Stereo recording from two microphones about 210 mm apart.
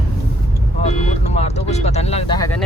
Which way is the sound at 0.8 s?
30° left (ahead or behind).